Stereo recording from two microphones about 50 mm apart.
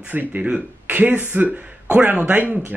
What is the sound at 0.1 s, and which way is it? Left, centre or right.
Speech, right.